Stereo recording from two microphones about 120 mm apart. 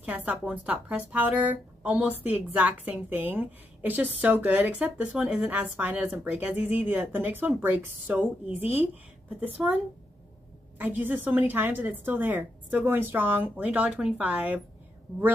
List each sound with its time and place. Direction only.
0.0 s speech: 15° right (ahead or behind)
10.8 s speech: 15° right (ahead or behind)